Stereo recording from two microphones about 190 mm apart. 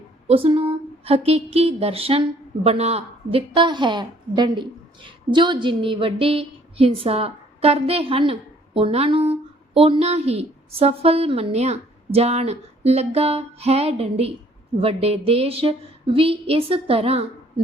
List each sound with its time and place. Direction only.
0.3 s a woman's voice: 30° right (ahead or behind)